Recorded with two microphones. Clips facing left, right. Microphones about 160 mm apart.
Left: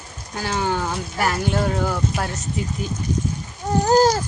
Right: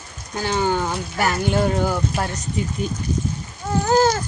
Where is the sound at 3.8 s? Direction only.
35° left (ahead or behind).